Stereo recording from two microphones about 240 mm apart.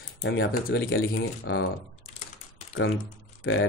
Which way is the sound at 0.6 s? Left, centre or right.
Left.